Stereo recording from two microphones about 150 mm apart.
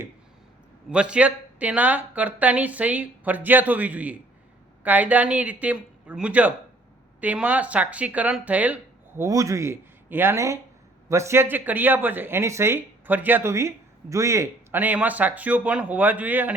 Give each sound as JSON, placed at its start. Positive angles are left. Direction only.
{"t": 0.9, "sound": "speech", "side_deg": -5}